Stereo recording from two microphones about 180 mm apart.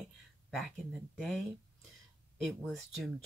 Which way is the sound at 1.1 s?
Centre (ahead or behind).